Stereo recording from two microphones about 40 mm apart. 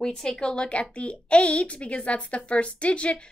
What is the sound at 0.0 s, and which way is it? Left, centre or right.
A woman's voice, centre.